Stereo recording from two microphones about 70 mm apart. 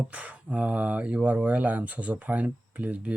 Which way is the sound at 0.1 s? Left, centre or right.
Centre.